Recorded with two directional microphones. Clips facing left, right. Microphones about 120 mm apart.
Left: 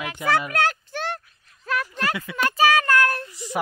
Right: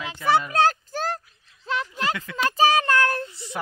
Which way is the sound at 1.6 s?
25° right (ahead or behind).